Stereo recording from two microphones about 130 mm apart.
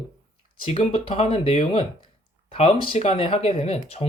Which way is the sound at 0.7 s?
45° left (ahead or behind).